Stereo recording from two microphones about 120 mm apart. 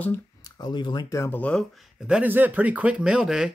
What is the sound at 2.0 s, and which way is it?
Speech, 5° right (ahead or behind).